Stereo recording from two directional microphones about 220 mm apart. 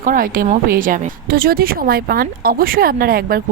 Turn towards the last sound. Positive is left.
turn(degrees=-40)  # may be behind; listen again after turning